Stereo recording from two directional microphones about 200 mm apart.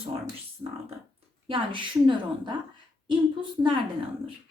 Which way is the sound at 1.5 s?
25° right (ahead or behind).